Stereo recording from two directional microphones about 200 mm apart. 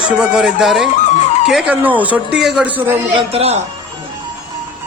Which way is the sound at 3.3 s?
30° right (ahead or behind).